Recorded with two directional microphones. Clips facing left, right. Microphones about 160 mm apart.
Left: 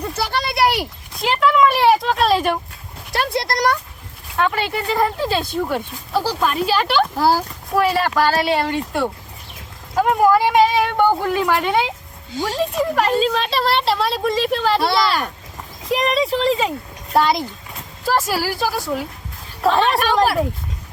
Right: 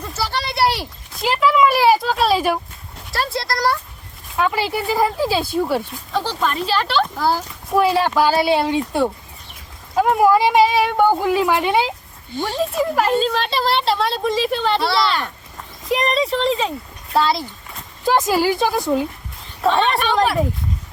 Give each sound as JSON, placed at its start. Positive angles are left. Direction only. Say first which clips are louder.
{"t": 0.4, "sound": "a sound", "louder": "left 1 dB", "side_deg": 15}
{"t": 1.1, "sound": "a woman's voice", "louder": "even", "side_deg": 0}
{"t": 3.2, "sound": "speech", "louder": "left 2 dB", "side_deg": 20}
{"t": 4.4, "sound": "a woman's voice", "louder": "even", "side_deg": -5}
{"t": 6.1, "sound": "speech", "louder": "left 2 dB", "side_deg": 5}
{"t": 7.2, "sound": "a child's voice", "louder": "left 3 dB", "side_deg": 35}
{"t": 7.8, "sound": "speech", "louder": "right 1 dB", "side_deg": -10}
{"t": 9.9, "sound": "a woman's voice", "louder": "even", "side_deg": 0}
{"t": 17.2, "sound": "speech", "louder": "left 1 dB", "side_deg": 15}
{"t": 18.0, "sound": "speech", "louder": "right 3 dB", "side_deg": -15}
{"t": 19.6, "sound": "a woman's voice", "louder": "left 1 dB", "side_deg": 0}